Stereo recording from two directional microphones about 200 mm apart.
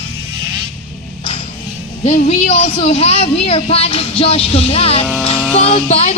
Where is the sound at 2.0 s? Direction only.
35° left (ahead or behind).